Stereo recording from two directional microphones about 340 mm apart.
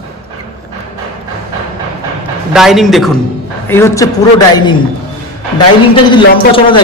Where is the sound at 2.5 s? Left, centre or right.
Centre.